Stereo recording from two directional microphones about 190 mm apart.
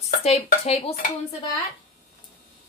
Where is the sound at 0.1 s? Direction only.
35° left (ahead or behind).